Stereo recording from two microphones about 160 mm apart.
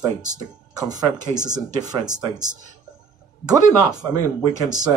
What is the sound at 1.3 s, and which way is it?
Speech, 50° right (ahead or behind).